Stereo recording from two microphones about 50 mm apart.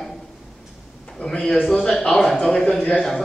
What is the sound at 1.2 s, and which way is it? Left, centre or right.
A man's voice, centre.